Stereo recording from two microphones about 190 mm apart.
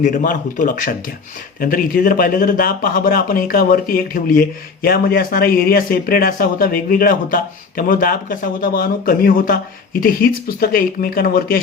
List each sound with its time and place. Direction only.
0.0 s speech: 45° left (ahead or behind)